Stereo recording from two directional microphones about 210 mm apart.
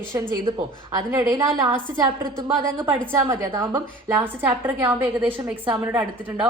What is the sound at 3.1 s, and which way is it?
A woman's voice, 15° right (ahead or behind).